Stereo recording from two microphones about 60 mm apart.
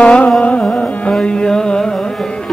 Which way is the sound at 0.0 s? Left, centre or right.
Centre.